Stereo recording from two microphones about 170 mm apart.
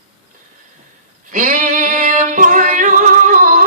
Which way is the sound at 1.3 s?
50° right (ahead or behind).